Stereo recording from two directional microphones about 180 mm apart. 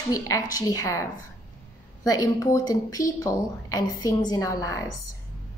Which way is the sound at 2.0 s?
20° left (ahead or behind).